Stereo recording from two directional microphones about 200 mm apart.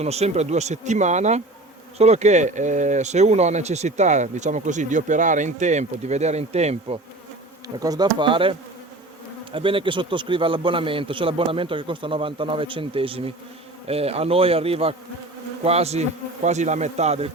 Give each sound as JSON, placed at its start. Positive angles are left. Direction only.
{"t": 0.0, "sound": "speech", "side_deg": -30}
{"t": 7.8, "sound": "a man's voice", "side_deg": -20}